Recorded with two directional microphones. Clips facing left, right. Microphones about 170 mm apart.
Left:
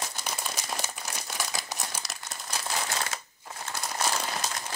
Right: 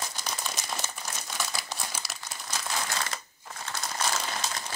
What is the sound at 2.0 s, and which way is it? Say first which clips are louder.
Crumpling: left 1 dB; 5° right (ahead or behind).